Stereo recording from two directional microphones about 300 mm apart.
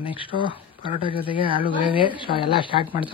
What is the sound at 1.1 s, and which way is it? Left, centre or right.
Speech, centre.